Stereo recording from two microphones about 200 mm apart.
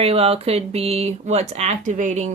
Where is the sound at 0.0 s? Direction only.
30° right (ahead or behind).